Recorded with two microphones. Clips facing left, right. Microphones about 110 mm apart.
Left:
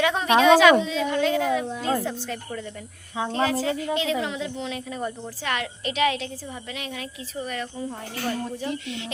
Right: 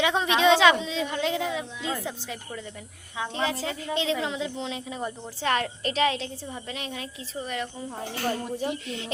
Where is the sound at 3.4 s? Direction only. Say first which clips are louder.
Left 5 dB; 25° right (ahead or behind).